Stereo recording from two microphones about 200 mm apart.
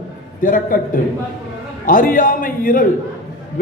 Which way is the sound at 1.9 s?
40° left (ahead or behind).